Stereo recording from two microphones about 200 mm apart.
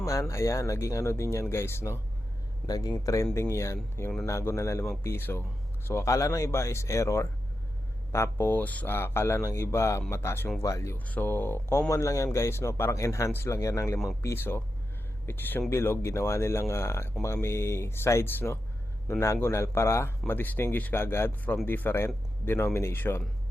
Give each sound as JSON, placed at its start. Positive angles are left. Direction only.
{"t": 0.0, "sound": "speech", "side_deg": 15}